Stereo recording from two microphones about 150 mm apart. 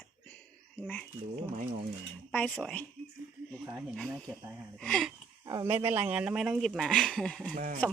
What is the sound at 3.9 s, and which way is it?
Speech, 5° left (ahead or behind).